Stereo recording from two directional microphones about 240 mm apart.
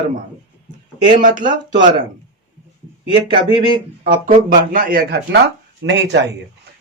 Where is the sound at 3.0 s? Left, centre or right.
Centre.